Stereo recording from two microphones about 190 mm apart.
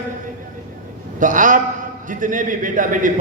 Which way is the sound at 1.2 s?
45° right (ahead or behind).